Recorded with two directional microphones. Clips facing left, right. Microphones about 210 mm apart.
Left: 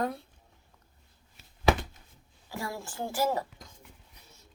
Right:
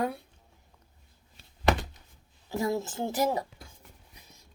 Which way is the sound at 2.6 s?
20° right (ahead or behind).